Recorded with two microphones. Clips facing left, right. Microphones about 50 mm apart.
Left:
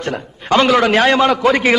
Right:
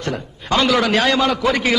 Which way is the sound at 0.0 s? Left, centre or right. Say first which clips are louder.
Left 2 dB; left.